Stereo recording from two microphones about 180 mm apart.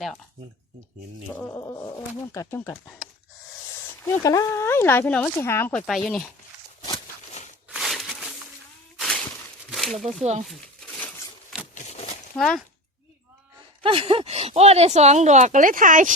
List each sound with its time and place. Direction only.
1.4 s speech: 15° left (ahead or behind)
4.0 s speech: 15° left (ahead or behind); by 6.2 s centre (ahead or behind)
7.7 s a sound: centre (ahead or behind)
10.0 s speech: centre (ahead or behind)
11.7 s a sound: 45° left (ahead or behind)
12.4 s speech: centre (ahead or behind)
13.8 s speech: 30° right (ahead or behind); by 16.1 s 45° right (ahead or behind)